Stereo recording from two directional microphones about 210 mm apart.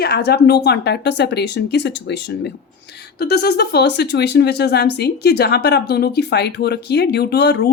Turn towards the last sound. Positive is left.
turn(degrees=50)  # may be behind; listen again after turning